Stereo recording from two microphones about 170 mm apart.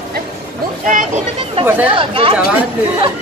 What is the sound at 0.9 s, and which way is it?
Speech, 50° right (ahead or behind).